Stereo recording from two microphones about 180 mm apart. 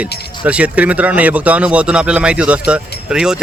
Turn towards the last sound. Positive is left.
turn(degrees=-5)  # may be behind; listen again after turning